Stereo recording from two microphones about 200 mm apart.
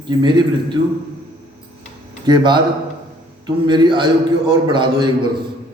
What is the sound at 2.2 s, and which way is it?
A man's voice, 20° right (ahead or behind).